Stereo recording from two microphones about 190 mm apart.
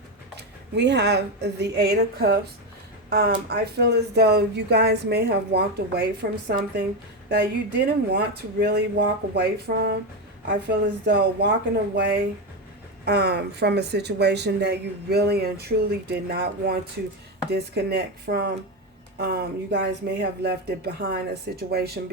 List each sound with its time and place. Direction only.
0.3 s speech: 60° right (ahead or behind)
7.3 s speech: 55° right (ahead or behind)